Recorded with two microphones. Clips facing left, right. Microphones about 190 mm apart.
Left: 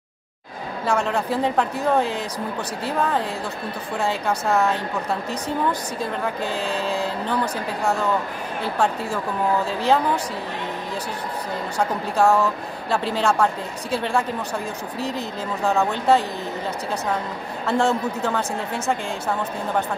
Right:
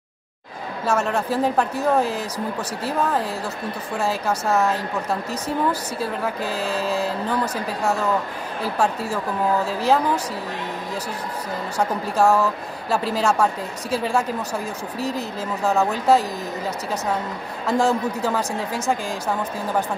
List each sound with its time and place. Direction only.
0.8 s speech: centre (ahead or behind)
8.7 s speech: centre (ahead or behind)
12.2 s speech: centre (ahead or behind)
15.0 s speech: 35° right (ahead or behind)
15.6 s speech: centre (ahead or behind)
17.6 s speech: centre (ahead or behind)